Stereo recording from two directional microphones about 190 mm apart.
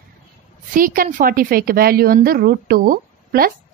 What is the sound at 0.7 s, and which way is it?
A woman's voice, 45° right (ahead or behind).